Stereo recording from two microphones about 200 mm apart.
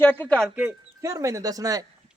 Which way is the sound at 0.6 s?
10° right (ahead or behind).